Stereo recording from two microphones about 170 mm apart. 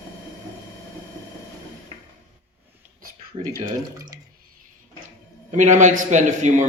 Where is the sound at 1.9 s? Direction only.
30° left (ahead or behind).